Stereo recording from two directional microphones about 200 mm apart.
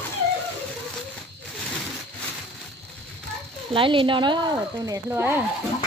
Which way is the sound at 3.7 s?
25° right (ahead or behind).